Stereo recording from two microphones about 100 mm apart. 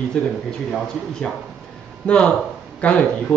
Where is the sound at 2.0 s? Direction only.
10° left (ahead or behind).